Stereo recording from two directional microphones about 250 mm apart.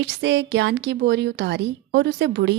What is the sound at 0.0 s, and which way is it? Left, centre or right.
A woman's voice, right.